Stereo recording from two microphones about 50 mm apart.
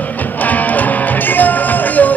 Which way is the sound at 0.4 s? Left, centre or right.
Left.